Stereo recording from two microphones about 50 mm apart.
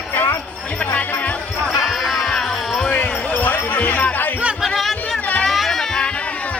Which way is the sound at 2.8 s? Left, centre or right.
Left.